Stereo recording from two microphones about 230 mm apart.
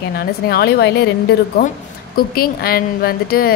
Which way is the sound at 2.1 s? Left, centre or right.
Left.